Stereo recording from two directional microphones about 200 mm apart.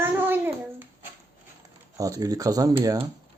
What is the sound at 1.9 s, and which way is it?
Speech, 15° right (ahead or behind).